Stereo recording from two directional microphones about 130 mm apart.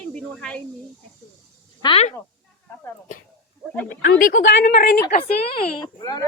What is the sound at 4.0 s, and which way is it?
Speech, 90° left.